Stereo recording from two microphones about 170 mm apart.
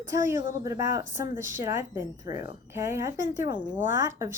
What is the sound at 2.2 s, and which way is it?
Speech, 50° left (ahead or behind).